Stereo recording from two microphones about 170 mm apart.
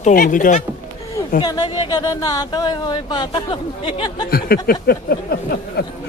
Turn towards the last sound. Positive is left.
turn(degrees=65)  # may be behind; listen again after turning